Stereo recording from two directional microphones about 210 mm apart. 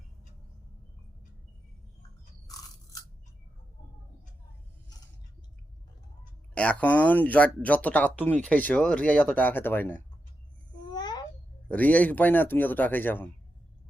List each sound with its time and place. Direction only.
6.5 s speech: 5° left (ahead or behind)
10.9 s babbling: 20° left (ahead or behind)
11.7 s speech: 5° left (ahead or behind)